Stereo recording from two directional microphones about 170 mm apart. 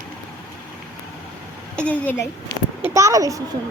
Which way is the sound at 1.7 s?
5° left (ahead or behind).